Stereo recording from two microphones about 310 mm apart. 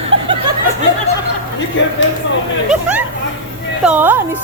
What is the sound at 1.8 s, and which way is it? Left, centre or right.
Speech, left.